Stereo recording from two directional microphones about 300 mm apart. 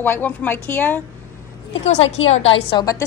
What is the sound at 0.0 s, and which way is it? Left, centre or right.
A woman's voice, centre.